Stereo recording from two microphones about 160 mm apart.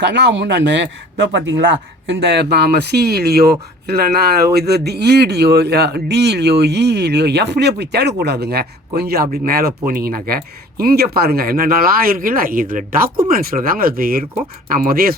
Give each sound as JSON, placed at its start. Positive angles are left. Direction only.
{"t": 0.0, "sound": "speech", "side_deg": -90}
{"t": 4.5, "sound": "speech", "side_deg": -90}